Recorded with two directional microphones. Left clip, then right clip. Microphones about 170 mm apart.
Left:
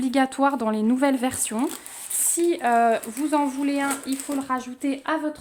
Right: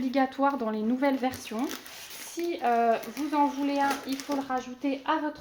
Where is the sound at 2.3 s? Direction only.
90° left.